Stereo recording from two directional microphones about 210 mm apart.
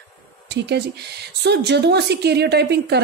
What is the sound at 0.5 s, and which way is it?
A woman's voice, 55° right (ahead or behind).